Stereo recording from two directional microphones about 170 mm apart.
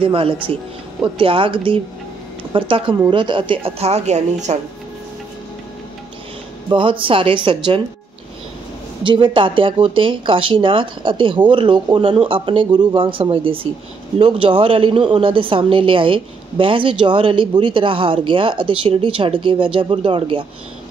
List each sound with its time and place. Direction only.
0.0 s a woman's voice: 30° right (ahead or behind)
6.7 s a woman's voice: 30° right (ahead or behind)
9.0 s a woman's voice: 30° right (ahead or behind)